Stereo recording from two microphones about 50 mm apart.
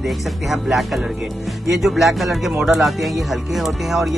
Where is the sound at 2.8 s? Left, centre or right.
Centre.